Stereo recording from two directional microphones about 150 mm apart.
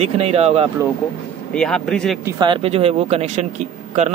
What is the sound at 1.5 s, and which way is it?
Speech, 5° left (ahead or behind).